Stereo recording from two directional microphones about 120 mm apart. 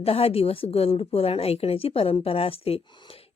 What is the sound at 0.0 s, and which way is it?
A woman's voice, 55° left (ahead or behind).